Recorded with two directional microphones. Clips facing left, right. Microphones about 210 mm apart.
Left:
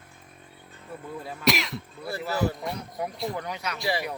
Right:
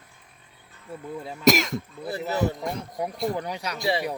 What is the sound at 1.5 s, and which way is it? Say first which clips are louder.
Speech: right 6 dB; 45° right (ahead or behind).